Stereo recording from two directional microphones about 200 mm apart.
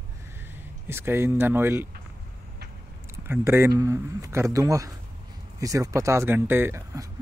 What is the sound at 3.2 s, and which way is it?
Speech, 10° right (ahead or behind).